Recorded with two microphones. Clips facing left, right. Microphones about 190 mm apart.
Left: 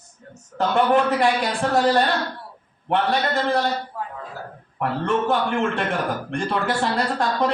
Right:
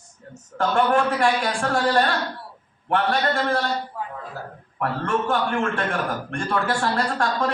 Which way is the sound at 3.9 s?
Centre (ahead or behind).